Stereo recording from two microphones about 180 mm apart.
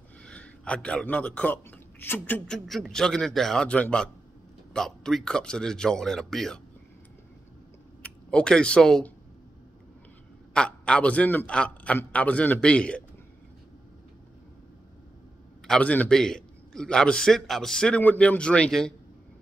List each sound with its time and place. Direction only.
0.2 s a man's voice: 5° left (ahead or behind)
8.0 s speech: 5° left (ahead or behind)
10.5 s a man's voice: 5° left (ahead or behind)
15.6 s a man's voice: 5° left (ahead or behind)